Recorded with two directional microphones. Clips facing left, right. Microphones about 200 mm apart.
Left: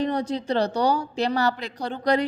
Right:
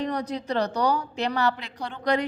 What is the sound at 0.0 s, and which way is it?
A woman's voice, 30° left (ahead or behind).